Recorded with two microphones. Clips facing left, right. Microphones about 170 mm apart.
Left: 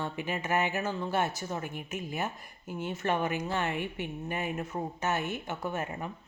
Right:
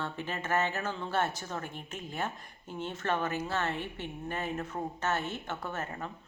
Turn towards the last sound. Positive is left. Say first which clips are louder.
# left 3 dB
turn(degrees=15)  # may be behind; listen again after turning